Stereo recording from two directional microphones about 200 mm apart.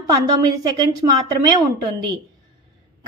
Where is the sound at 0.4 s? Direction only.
20° right (ahead or behind).